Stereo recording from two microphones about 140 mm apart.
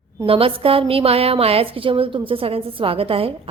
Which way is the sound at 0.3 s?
40° right (ahead or behind).